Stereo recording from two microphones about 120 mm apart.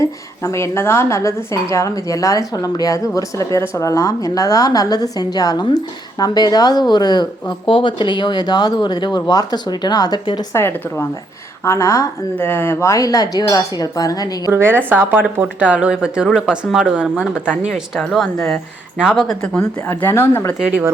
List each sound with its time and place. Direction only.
0.0 s a woman's voice: 25° left (ahead or behind)
10.5 s speech: 20° left (ahead or behind)
14.5 s speech: 15° right (ahead or behind)
16.6 s speech: 5° left (ahead or behind)
16.9 s speech: 10° right (ahead or behind)
17.7 s speech: 5° left (ahead or behind)
18.3 s speech: 25° left (ahead or behind)
19.0 s speech: 5° left (ahead or behind)
19.9 s speech: 20° left (ahead or behind)
20.6 s speech: 5° right (ahead or behind)